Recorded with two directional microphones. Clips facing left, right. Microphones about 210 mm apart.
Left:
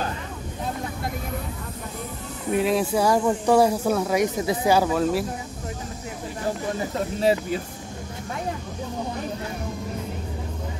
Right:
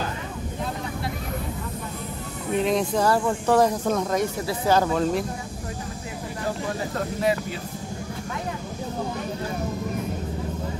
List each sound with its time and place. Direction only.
2.5 s speech: 5° left (ahead or behind)